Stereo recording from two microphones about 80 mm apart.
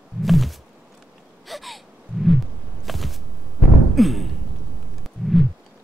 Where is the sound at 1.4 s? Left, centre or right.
Centre.